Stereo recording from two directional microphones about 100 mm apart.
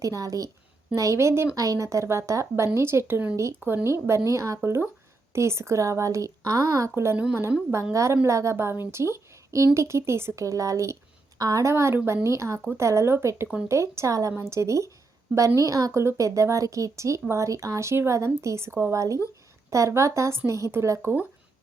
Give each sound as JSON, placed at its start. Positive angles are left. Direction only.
{"t": 0.0, "sound": "a woman's voice", "side_deg": -35}
{"t": 8.9, "sound": "a sound", "side_deg": -30}
{"t": 9.7, "sound": "a woman's voice", "side_deg": -30}